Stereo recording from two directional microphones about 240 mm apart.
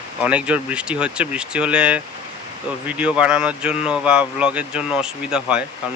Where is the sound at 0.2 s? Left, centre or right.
Centre.